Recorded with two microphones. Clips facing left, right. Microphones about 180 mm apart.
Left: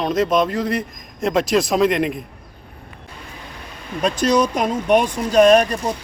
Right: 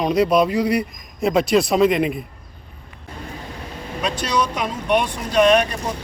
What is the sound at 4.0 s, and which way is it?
Speech, 45° left (ahead or behind).